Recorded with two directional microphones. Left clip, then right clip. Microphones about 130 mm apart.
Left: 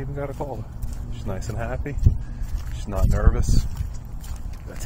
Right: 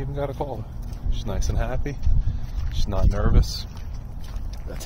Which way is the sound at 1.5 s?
30° right (ahead or behind).